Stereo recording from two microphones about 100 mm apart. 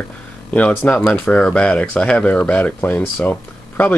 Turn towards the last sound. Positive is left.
turn(degrees=15)  # may be behind; listen again after turning